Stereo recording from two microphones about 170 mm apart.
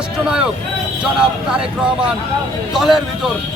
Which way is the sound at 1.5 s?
5° right (ahead or behind).